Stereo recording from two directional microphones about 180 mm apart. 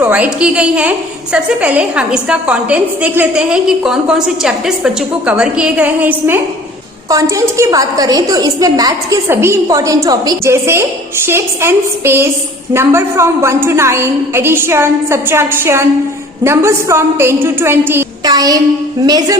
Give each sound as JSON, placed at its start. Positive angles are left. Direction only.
{"t": 0.0, "sound": "a woman's voice", "side_deg": -10}